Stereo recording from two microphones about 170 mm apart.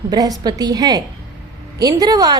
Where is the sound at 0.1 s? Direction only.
25° right (ahead or behind).